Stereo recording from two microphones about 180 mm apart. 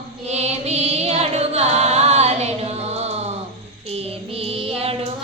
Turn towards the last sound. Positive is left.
turn(degrees=-35)  # may be behind; listen again after turning